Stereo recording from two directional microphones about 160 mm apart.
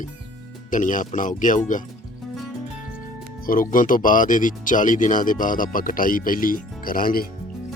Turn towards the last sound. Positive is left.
turn(degrees=65)  # may be behind; listen again after turning